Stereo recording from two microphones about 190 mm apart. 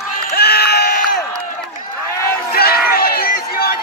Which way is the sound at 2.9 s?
50° left (ahead or behind).